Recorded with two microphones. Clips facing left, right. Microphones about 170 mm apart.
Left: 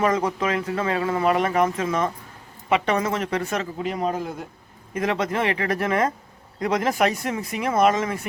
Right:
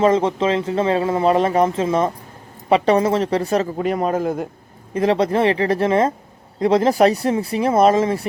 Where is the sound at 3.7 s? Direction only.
50° right (ahead or behind).